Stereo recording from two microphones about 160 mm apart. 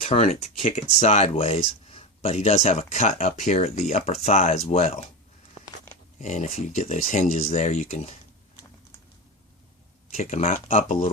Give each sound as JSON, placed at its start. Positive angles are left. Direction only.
{"t": 0.0, "sound": "speech", "side_deg": 40}
{"t": 6.1, "sound": "speech", "side_deg": 45}
{"t": 10.2, "sound": "speech", "side_deg": 45}